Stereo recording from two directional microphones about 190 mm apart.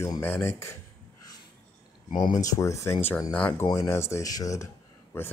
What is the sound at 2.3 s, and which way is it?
Speech, 20° left (ahead or behind).